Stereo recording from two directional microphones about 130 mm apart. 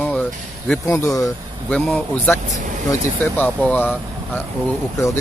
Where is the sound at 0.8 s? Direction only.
25° left (ahead or behind).